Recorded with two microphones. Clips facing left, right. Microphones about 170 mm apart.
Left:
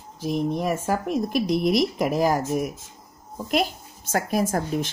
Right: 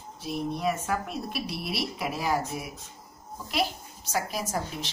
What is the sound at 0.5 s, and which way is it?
Speech, 45° left (ahead or behind).